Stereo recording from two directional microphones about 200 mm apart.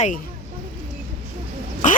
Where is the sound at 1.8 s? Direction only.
40° left (ahead or behind).